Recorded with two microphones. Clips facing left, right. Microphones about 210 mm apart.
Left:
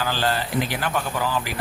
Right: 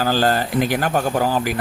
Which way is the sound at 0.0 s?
45° right (ahead or behind).